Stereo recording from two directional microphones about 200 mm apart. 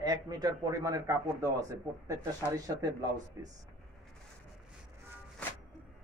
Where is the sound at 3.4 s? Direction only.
15° right (ahead or behind).